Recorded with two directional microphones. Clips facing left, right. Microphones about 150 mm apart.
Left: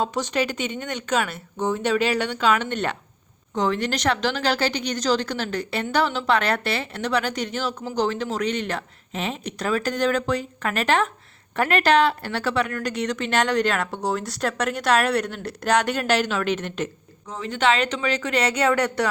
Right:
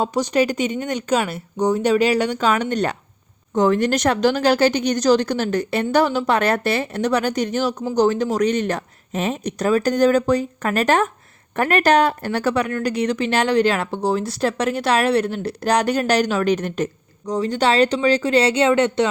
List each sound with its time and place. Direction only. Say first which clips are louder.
0.0 s a woman's voice: right 5 dB; 40° right (ahead or behind)